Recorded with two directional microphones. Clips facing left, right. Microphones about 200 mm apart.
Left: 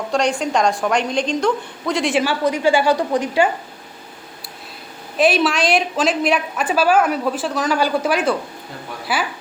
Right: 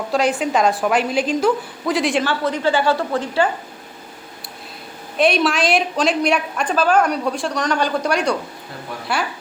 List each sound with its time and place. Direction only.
0.1 s a woman's voice: 5° right (ahead or behind)
2.2 s a woman's voice: 10° left (ahead or behind)
5.1 s a woman's voice: centre (ahead or behind)